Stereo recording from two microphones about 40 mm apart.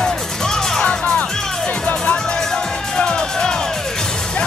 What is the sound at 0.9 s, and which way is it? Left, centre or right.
Music, left.